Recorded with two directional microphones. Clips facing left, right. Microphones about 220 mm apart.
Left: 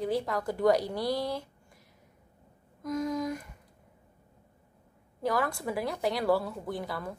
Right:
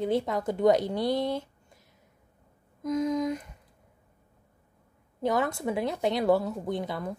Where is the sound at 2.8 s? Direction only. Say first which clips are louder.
Right 4 dB; 20° right (ahead or behind).